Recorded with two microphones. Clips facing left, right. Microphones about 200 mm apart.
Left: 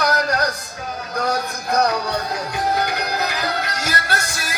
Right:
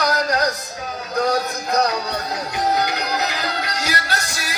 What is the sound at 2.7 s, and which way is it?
Music, 55° left (ahead or behind).